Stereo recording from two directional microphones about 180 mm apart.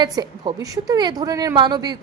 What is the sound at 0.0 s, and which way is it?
A woman's voice, 25° right (ahead or behind).